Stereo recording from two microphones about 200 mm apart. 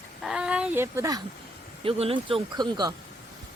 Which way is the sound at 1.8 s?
30° right (ahead or behind).